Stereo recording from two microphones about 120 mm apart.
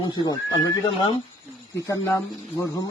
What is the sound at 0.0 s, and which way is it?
Speech, 35° left (ahead or behind).